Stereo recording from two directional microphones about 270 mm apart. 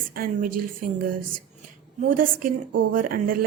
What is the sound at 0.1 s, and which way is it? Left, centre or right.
Speech, right.